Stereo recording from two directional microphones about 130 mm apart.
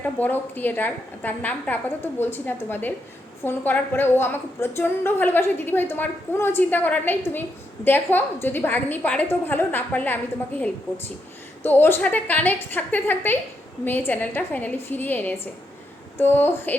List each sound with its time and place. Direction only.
0.0 s a woman's voice: 15° left (ahead or behind)